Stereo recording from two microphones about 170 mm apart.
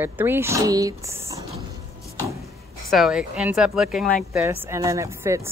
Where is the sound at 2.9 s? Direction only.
5° right (ahead or behind).